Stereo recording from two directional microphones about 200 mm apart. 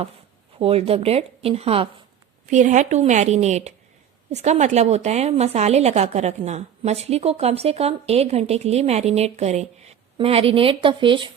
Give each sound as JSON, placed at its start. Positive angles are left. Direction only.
{"t": 0.6, "sound": "a woman's voice", "side_deg": -30}